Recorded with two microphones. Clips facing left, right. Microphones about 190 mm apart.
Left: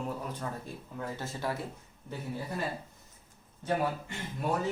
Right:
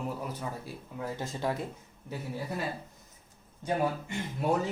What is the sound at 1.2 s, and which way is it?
Speech, 20° right (ahead or behind).